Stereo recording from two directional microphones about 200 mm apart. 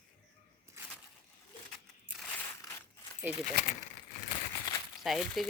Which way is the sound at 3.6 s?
55° left (ahead or behind).